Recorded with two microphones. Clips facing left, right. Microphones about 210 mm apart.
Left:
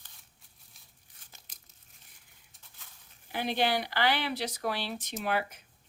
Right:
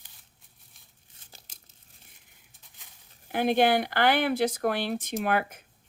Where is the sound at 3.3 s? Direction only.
50° right (ahead or behind).